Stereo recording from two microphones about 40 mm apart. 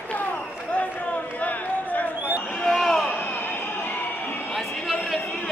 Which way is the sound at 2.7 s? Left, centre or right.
Centre.